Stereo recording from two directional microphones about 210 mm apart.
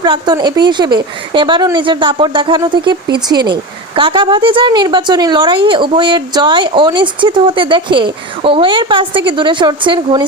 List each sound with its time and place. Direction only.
0.0 s a woman's voice: 20° right (ahead or behind)